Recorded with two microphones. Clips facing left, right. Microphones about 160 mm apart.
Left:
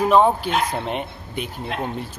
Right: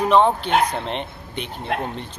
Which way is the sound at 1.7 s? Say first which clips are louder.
Right 3 dB; 55° right (ahead or behind).